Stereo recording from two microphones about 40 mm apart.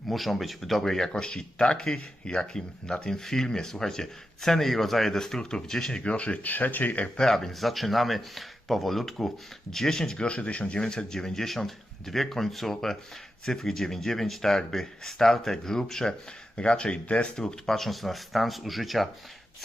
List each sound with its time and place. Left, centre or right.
0.1 s speech: centre
5.4 s speech: left
5.6 s speech: centre
6.0 s speech: left
6.5 s speech: left
7.2 s speech: centre
10.2 s speech: left
16.6 s speech: left
17.3 s speech: centre